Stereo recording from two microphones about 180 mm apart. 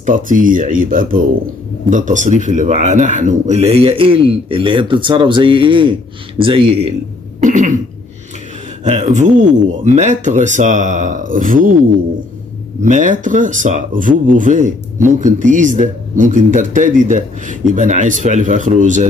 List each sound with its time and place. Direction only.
0.0 s speech: 45° right (ahead or behind); by 6.9 s 30° right (ahead or behind)
7.3 s throat clearing: 45° right (ahead or behind)
8.8 s speech: 40° right (ahead or behind)
12.8 s speech: 45° right (ahead or behind)